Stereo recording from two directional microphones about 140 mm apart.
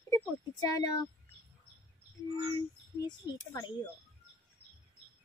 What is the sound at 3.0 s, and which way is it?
Speech, 30° left (ahead or behind).